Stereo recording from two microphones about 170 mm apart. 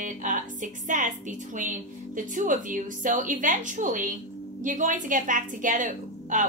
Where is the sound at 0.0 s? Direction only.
50° right (ahead or behind).